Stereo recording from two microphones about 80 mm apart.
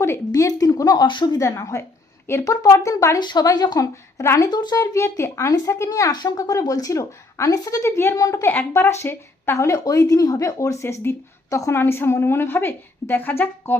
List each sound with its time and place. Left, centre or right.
0.3 s speech: left
1.0 s speech: left
1.4 s a woman's voice: left
3.2 s speech: left
3.4 s speech: left
4.8 s speech: left
7.9 s speech: left
8.1 s speech: left
8.4 s a woman's voice: left
9.6 s a woman's voice: left